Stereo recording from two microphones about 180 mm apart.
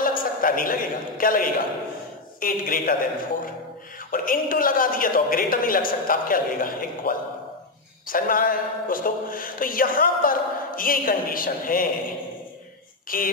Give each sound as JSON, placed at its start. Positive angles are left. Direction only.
{"t": 0.0, "sound": "a man's voice", "side_deg": 50}
{"t": 4.1, "sound": "speech", "side_deg": 50}
{"t": 13.1, "sound": "speech", "side_deg": 50}